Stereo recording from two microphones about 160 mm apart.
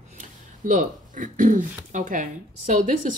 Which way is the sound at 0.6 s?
55° right (ahead or behind).